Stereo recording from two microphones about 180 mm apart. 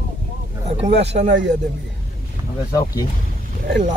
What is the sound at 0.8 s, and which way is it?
Speech, 35° right (ahead or behind).